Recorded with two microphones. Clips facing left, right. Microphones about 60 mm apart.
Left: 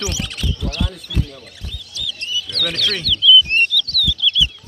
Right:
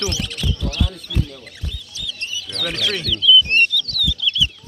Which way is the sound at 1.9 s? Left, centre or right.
Right.